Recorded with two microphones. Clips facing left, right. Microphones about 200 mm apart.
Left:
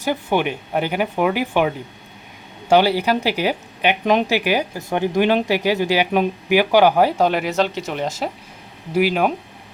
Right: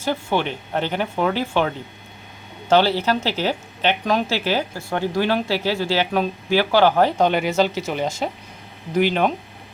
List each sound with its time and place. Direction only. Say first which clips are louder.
0.0 s speech: left 2 dB; 15° left (ahead or behind)